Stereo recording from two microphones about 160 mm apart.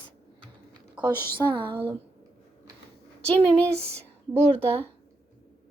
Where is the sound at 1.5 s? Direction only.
30° right (ahead or behind).